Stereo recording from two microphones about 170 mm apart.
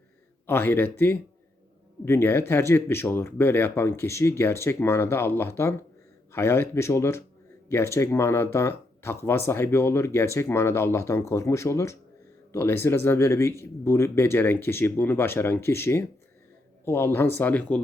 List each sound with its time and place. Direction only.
0.4 s speech: 15° left (ahead or behind)